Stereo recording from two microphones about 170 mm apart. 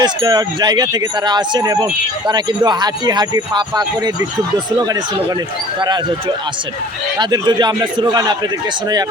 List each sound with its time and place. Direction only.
0.0 s speech: 25° right (ahead or behind)